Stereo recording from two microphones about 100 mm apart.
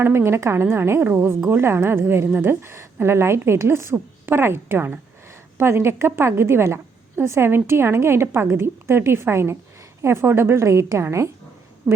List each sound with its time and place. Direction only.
0.0 s a woman's voice: 25° right (ahead or behind)